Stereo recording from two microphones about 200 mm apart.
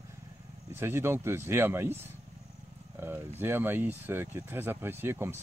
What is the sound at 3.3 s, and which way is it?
Speech, 10° right (ahead or behind).